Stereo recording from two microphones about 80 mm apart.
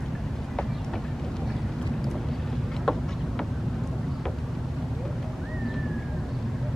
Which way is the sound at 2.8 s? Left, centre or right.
Centre.